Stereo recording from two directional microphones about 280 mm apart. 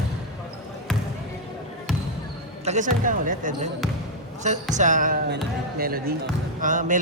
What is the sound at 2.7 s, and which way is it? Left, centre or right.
Speech, right.